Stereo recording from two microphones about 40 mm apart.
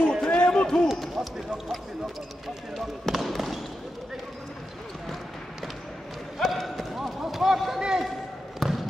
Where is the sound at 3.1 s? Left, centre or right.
Centre.